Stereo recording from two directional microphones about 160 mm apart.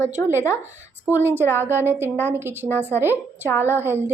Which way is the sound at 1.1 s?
15° right (ahead or behind).